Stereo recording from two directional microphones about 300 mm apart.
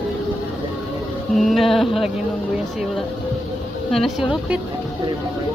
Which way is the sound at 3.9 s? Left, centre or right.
Centre.